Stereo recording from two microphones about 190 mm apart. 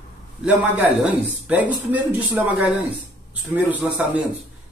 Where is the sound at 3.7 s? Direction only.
10° right (ahead or behind).